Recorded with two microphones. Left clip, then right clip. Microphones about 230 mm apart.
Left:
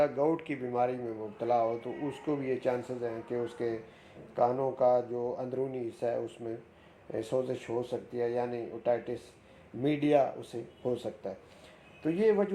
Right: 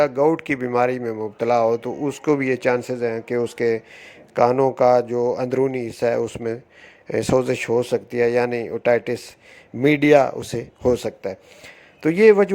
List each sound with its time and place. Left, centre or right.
0.0 s speech: right